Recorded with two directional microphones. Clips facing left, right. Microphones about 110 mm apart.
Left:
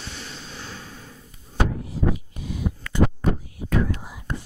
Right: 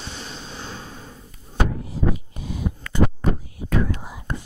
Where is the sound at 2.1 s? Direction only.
30° right (ahead or behind).